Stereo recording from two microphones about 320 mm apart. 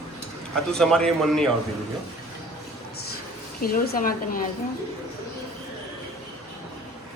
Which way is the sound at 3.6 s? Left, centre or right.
Left.